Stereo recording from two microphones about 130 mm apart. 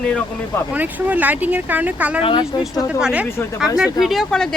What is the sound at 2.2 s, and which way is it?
Speech, 35° left (ahead or behind).